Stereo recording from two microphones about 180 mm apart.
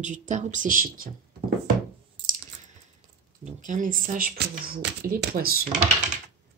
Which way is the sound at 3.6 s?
45° right (ahead or behind).